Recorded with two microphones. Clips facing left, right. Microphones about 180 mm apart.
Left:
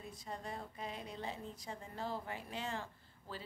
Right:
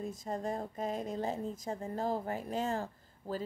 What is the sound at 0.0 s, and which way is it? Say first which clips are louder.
A woman's voice: right 10 dB; 45° right (ahead or behind).